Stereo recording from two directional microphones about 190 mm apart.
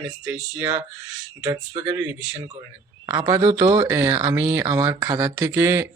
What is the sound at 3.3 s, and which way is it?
Speech, 20° right (ahead or behind).